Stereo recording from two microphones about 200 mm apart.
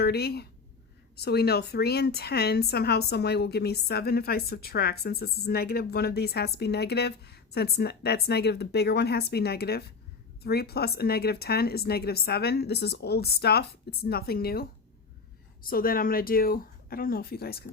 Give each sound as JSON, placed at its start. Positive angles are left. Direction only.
{"t": 0.0, "sound": "a woman's voice", "side_deg": 55}